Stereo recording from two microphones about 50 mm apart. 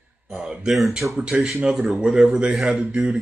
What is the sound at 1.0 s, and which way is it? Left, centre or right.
Speech, right.